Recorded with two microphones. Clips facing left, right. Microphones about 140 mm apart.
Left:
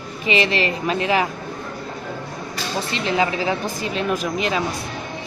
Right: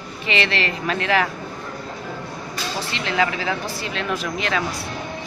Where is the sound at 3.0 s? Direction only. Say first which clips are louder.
Left 2 dB; 20° left (ahead or behind).